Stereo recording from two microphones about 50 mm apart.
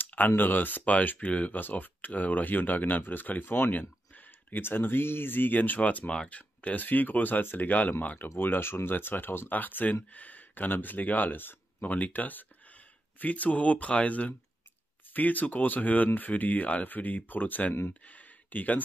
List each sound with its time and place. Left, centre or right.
0.0 s a sound: left
0.4 s speech: left
1.2 s speech: left
4.1 s speech: left
8.4 s speech: left
18.0 s a sound: left